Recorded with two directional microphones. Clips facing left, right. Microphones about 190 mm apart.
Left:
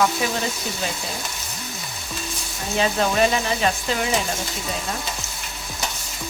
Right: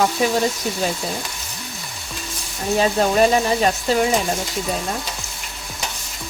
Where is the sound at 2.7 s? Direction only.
40° right (ahead or behind).